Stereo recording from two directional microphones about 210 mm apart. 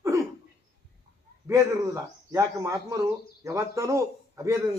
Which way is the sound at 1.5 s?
15° right (ahead or behind).